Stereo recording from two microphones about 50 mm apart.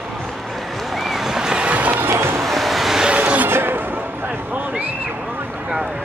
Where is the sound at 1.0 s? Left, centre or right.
Centre.